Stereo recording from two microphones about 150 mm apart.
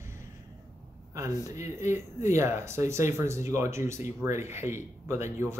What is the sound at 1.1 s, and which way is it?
Speech, 20° right (ahead or behind).